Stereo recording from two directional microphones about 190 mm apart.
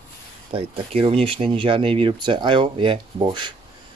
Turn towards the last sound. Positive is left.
turn(degrees=-25)  # may be behind; listen again after turning